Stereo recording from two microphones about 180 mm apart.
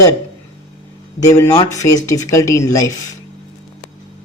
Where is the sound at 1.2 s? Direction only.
20° left (ahead or behind).